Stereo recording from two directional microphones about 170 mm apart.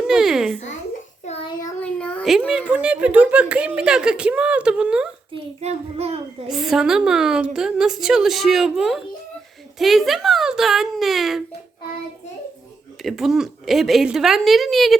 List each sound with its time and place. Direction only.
0.1 s a child's voice: 5° right (ahead or behind)
1.5 s a sound: 25° left (ahead or behind)
1.8 s a sound: 5° left (ahead or behind)
2.5 s speech: 5° right (ahead or behind)
5.3 s a child's voice: 40° right (ahead or behind)
6.5 s a woman's voice: centre (ahead or behind)
13.0 s a woman's voice: centre (ahead or behind)